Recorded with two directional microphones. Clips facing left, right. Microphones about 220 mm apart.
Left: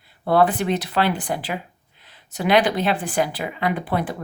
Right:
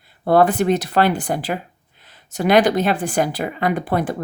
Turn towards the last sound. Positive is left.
turn(degrees=-45)  # may be behind; listen again after turning